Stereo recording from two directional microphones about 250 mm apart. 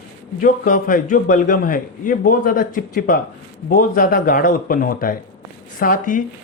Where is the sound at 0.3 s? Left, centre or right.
Left.